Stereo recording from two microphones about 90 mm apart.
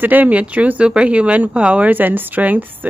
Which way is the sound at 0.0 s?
20° right (ahead or behind).